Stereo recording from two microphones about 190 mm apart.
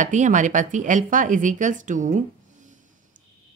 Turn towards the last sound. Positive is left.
turn(degrees=-40)  # may be behind; listen again after turning